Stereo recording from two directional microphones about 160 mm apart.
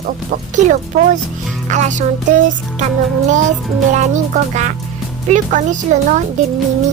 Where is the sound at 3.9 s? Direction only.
50° right (ahead or behind).